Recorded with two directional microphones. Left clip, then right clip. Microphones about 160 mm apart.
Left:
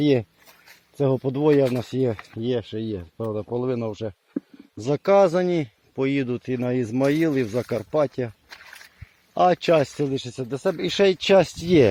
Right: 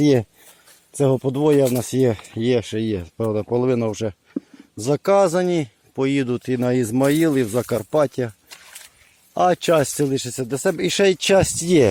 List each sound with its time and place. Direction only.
0.0 s speech: 35° right (ahead or behind)
0.9 s speech: 25° right (ahead or behind); by 4.4 s 50° right (ahead or behind)
4.8 s speech: 25° right (ahead or behind)
9.3 s speech: 20° right (ahead or behind)
10.0 s speech: 35° right (ahead or behind); by 11.9 s 20° right (ahead or behind)